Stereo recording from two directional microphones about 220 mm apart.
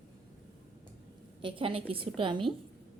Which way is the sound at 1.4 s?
25° right (ahead or behind).